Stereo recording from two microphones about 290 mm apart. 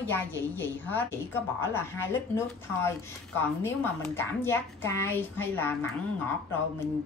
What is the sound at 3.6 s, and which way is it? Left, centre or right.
A woman's voice, centre.